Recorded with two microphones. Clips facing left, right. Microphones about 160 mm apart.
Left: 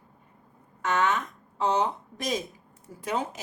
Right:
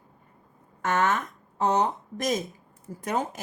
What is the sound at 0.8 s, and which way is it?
A woman's voice, 50° right (ahead or behind).